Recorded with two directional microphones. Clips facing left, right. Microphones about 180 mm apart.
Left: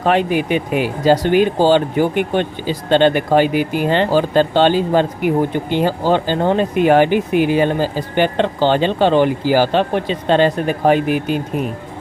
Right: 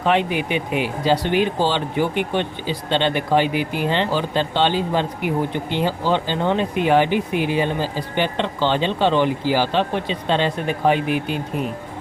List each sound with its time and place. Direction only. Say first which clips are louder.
0.0 s speech: left 4 dB; 45° left (ahead or behind)